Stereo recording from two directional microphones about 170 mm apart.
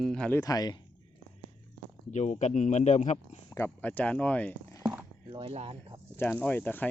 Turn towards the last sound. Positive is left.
turn(degrees=10)  # may be behind; listen again after turning